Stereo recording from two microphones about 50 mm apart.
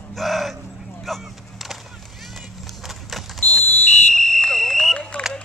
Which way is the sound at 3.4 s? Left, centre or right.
Left.